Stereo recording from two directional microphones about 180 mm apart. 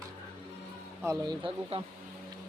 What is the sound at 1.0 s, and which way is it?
Speech, 25° right (ahead or behind).